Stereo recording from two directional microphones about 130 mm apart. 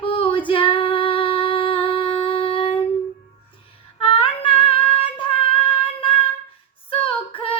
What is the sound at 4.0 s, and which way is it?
Female singing, 40° left (ahead or behind).